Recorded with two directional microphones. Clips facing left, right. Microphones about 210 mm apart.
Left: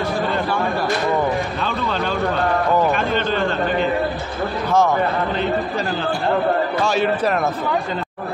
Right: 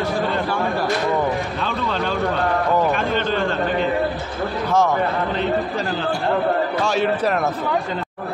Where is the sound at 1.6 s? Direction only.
Centre (ahead or behind).